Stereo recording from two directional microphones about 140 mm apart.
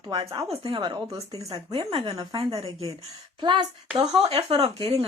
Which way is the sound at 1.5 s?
45° right (ahead or behind).